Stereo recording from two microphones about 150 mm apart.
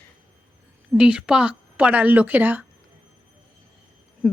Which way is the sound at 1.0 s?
5° right (ahead or behind).